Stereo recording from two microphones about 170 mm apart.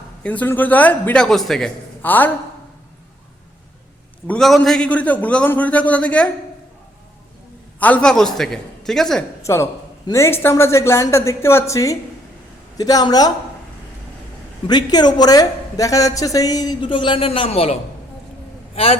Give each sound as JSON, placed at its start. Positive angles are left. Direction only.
{"t": 0.2, "sound": "a man's voice", "side_deg": 10}
{"t": 4.3, "sound": "a man's voice", "side_deg": 0}
{"t": 7.8, "sound": "a man's voice", "side_deg": 10}
{"t": 9.4, "sound": "a man's voice", "side_deg": 15}
{"t": 14.7, "sound": "a woman's voice", "side_deg": 25}